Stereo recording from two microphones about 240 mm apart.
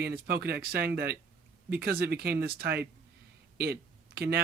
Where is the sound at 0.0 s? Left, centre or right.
Right.